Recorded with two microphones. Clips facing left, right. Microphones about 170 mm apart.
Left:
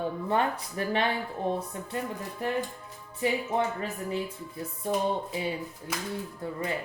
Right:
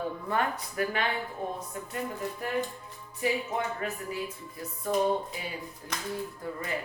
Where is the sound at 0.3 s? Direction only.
25° left (ahead or behind).